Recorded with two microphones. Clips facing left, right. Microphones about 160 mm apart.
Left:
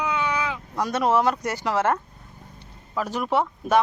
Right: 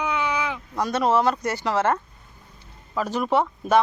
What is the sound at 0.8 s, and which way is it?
Speech, 10° left (ahead or behind).